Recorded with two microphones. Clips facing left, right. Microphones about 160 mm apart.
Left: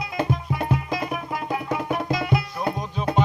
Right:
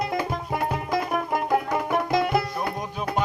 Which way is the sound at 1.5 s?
50° right (ahead or behind).